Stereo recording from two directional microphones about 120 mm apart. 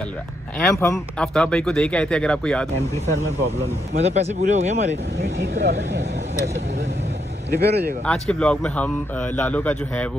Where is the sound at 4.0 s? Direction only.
65° right (ahead or behind).